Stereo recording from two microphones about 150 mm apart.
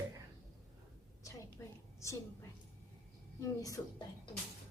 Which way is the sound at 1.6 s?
15° left (ahead or behind).